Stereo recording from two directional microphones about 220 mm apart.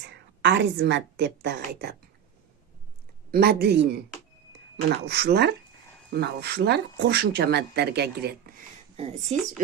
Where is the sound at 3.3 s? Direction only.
45° right (ahead or behind).